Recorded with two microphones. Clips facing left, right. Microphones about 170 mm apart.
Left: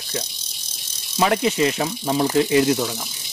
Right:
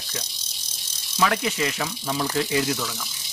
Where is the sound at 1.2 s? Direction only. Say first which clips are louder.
Left 5 dB; 25° left (ahead or behind).